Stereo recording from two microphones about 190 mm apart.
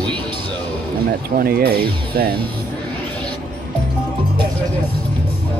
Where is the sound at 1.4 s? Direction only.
50° right (ahead or behind).